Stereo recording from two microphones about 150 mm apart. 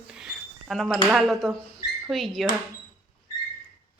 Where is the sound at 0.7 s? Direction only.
Centre (ahead or behind).